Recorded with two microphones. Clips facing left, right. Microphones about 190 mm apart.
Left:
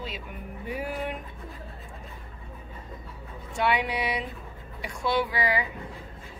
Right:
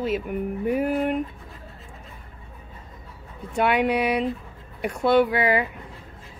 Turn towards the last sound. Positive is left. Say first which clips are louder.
# right 7 dB
turn(degrees=-60)  # may be behind; listen again after turning